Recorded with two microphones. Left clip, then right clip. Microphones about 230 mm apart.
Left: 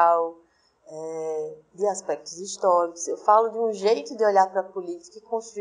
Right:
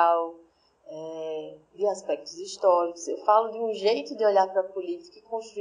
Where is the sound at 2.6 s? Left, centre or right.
Left.